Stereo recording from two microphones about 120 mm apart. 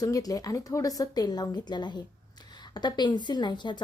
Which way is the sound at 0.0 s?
30° left (ahead or behind).